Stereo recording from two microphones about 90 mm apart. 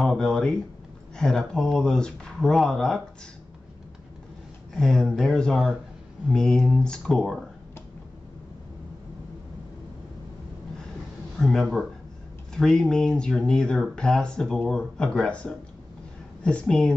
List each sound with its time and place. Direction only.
0.0 s speech: 5° left (ahead or behind)
4.7 s speech: 5° left (ahead or behind)
11.3 s speech: centre (ahead or behind)